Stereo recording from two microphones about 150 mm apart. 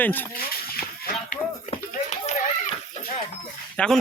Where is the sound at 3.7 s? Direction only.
5° left (ahead or behind).